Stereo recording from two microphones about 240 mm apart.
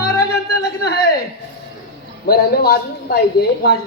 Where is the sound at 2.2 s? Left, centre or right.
Left.